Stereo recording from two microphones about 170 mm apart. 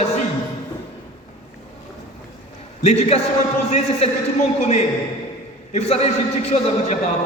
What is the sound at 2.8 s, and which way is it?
Speech, 40° left (ahead or behind).